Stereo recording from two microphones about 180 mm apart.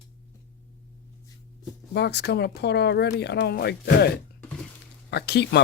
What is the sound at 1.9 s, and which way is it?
Speech, 65° left (ahead or behind).